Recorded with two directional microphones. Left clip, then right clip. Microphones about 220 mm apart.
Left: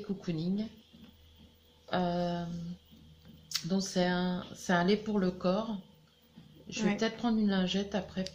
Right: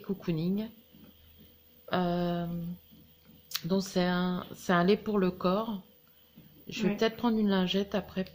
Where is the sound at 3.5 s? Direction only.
45° right (ahead or behind).